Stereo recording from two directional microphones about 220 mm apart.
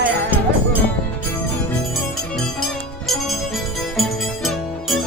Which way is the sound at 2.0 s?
Centre (ahead or behind).